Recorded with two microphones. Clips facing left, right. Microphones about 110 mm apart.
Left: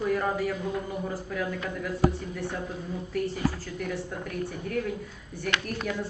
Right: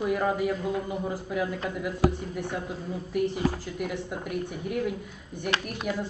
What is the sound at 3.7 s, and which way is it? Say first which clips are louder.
Speech: right 1 dB; 15° right (ahead or behind).